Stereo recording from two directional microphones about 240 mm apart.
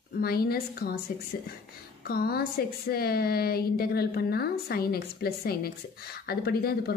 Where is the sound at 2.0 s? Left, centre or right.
Left.